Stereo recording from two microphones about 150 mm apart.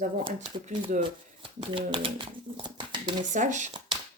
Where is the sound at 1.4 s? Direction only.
35° right (ahead or behind).